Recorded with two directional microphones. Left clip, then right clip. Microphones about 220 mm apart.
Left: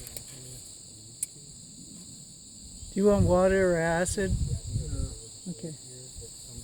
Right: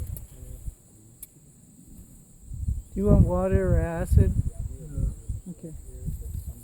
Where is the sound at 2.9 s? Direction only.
30° left (ahead or behind).